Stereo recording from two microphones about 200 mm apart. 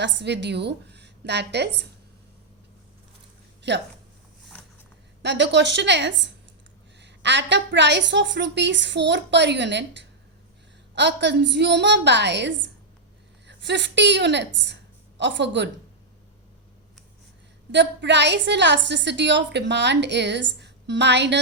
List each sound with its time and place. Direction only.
0.0 s a woman's voice: 60° right (ahead or behind)
3.6 s a woman's voice: 60° right (ahead or behind)
5.2 s a woman's voice: 60° right (ahead or behind)
17.7 s a woman's voice: 60° right (ahead or behind)